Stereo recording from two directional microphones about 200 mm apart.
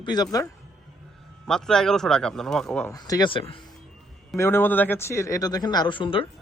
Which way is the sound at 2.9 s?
20° left (ahead or behind).